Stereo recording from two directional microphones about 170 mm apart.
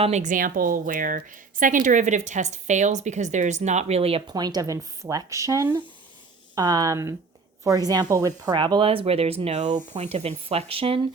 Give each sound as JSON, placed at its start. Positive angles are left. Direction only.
{"t": 0.0, "sound": "a woman's voice", "side_deg": -45}